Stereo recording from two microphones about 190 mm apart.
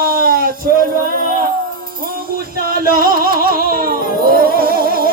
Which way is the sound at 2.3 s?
50° right (ahead or behind).